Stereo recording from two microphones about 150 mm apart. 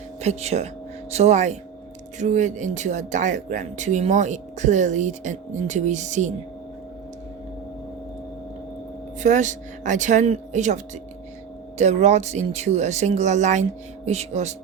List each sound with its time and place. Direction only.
0.2 s speech: 45° right (ahead or behind)
9.2 s speech: 55° right (ahead or behind)
11.8 s speech: 50° right (ahead or behind)